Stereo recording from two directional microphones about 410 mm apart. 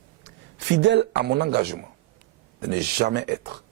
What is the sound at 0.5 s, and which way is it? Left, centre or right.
Speech, right.